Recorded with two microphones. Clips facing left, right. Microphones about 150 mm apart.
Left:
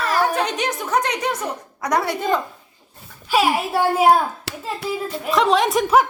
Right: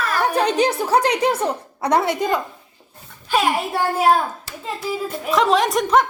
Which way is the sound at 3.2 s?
5° left (ahead or behind).